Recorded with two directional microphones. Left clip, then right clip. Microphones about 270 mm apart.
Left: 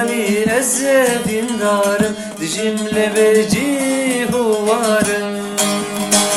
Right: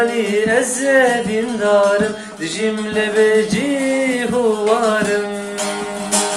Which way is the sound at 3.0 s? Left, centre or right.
Left.